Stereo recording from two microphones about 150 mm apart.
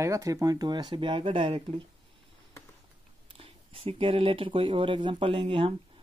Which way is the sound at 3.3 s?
40° right (ahead or behind).